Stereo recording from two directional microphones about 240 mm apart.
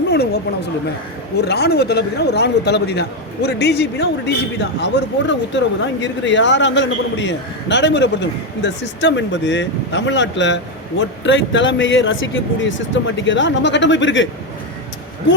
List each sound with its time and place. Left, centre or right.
0.1 s a man's voice: left